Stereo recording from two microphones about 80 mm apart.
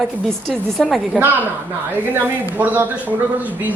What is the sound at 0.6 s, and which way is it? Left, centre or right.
Speech, centre.